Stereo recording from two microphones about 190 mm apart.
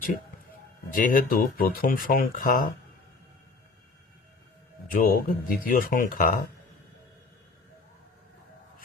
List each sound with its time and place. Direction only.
0.9 s speech: 45° left (ahead or behind)
4.9 s speech: 50° left (ahead or behind)